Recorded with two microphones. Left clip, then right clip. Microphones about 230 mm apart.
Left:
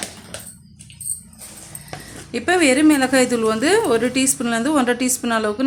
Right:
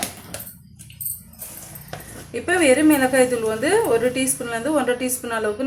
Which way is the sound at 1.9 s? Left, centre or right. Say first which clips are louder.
Left 2 dB; left.